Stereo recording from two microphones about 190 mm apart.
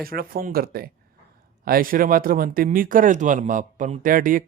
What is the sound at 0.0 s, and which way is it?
A man's voice, 50° right (ahead or behind).